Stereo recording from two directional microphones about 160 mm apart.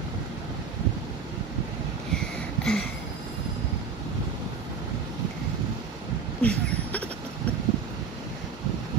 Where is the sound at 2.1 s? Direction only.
5° left (ahead or behind).